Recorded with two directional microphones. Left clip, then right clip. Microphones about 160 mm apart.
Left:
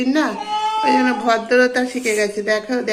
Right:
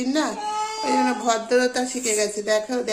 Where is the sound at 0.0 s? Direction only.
10° right (ahead or behind).